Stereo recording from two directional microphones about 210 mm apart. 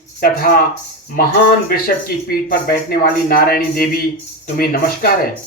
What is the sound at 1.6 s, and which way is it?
Speech, 45° left (ahead or behind).